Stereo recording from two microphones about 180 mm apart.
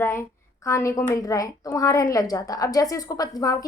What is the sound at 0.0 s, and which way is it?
A child's voice, 15° left (ahead or behind).